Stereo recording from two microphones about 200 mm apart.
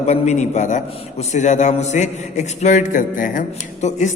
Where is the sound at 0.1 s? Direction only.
35° left (ahead or behind).